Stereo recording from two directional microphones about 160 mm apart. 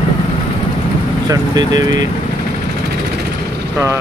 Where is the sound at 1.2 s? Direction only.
25° right (ahead or behind).